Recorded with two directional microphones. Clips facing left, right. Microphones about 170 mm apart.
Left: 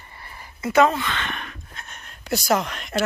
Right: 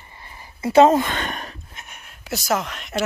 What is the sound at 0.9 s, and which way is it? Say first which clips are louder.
Speech: right 7 dB; 45° right (ahead or behind).